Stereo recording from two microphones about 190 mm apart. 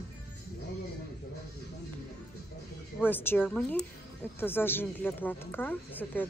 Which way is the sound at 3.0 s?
10° left (ahead or behind).